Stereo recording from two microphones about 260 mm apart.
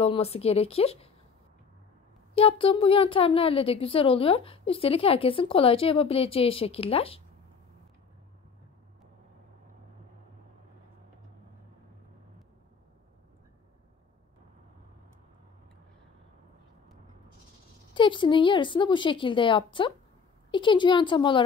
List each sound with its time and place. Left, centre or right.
0.0 s speech: left
2.3 s speech: left
17.9 s speech: centre